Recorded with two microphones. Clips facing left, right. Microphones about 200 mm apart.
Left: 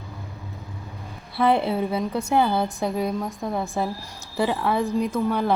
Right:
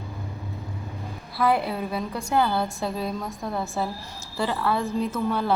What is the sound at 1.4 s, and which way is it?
A woman's voice, 25° left (ahead or behind).